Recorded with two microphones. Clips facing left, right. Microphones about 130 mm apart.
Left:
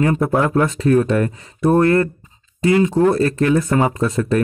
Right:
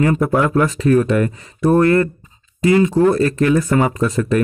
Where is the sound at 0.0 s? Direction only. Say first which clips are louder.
Right 1 dB; 30° left (ahead or behind).